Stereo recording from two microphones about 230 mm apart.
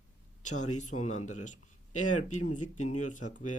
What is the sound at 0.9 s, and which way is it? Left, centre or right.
Speech, left.